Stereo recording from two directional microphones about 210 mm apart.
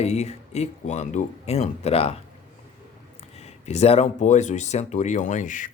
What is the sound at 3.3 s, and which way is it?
Speech, 30° left (ahead or behind).